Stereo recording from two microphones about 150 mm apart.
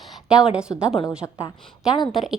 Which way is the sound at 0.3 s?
5° right (ahead or behind).